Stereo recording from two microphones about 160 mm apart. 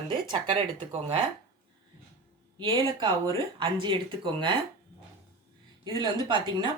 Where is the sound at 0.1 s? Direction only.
30° right (ahead or behind).